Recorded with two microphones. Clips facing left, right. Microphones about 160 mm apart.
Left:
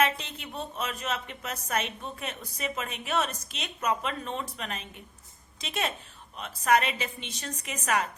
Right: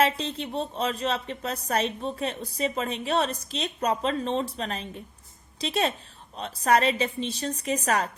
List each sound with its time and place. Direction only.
0.0 s speech: 30° right (ahead or behind)